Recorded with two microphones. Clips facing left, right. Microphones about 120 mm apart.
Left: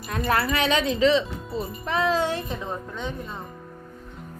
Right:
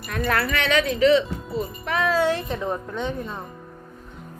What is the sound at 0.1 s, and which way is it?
Speech, 25° left (ahead or behind).